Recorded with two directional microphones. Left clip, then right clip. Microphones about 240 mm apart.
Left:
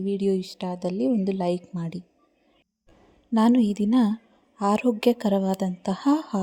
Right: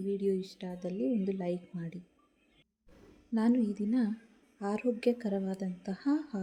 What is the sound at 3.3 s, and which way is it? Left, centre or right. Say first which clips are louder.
A woman's voice: left 10 dB; left.